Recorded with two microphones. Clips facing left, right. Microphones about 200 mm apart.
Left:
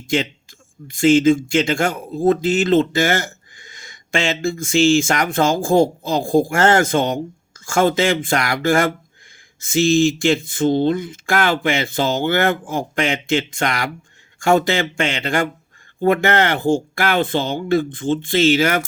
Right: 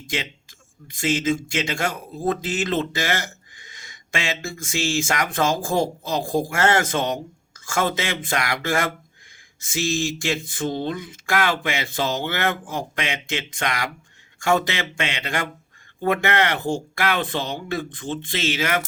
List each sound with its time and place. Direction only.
0.1 s speech: 30° left (ahead or behind)
4.7 s speech: 25° left (ahead or behind)